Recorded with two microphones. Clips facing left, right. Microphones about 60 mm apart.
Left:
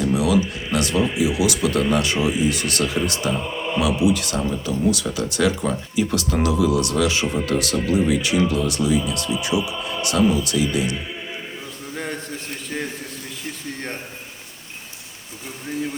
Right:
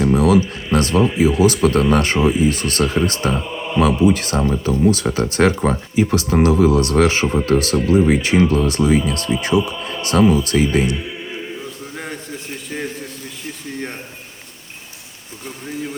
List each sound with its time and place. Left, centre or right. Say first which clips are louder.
0.0 s speech: right 5 dB; right
6.0 s speech: right 6 dB; right